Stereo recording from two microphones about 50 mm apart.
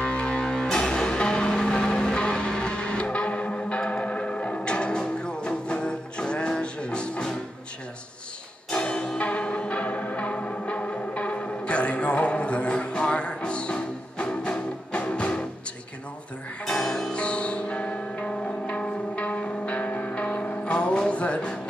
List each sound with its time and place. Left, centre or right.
0.0 s music: left
8.6 s music: centre
16.6 s music: centre
17.1 s music: left